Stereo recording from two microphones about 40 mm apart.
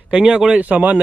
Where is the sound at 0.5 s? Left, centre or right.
Right.